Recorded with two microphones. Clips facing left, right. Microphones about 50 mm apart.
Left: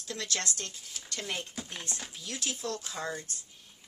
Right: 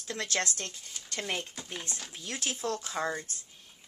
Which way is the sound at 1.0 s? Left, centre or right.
Right.